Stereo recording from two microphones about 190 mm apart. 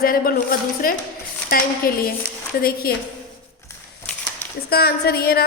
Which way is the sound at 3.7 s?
10° left (ahead or behind).